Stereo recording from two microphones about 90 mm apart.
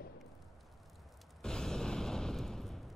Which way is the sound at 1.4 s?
5° left (ahead or behind).